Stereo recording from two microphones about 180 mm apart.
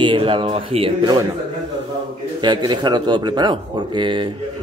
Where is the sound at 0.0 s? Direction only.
30° right (ahead or behind).